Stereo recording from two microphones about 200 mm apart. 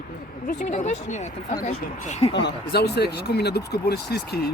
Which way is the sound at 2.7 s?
55° left (ahead or behind).